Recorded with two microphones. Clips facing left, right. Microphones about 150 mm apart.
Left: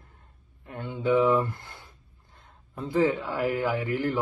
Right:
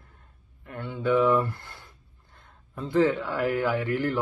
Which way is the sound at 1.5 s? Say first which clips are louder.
Even; 15° left (ahead or behind).